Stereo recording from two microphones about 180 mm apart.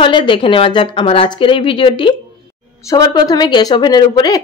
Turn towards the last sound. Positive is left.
turn(degrees=20)  # may be behind; listen again after turning